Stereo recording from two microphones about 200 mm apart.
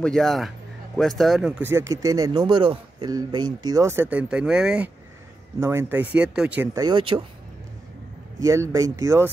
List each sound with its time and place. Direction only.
0.0 s speech: centre (ahead or behind)
6.8 s speech: 25° right (ahead or behind)
8.4 s speech: 15° right (ahead or behind)